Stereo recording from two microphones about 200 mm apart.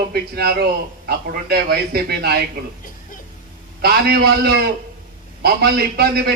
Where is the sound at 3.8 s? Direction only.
50° right (ahead or behind).